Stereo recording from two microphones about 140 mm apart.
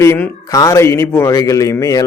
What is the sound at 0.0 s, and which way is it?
A man's voice, 20° left (ahead or behind).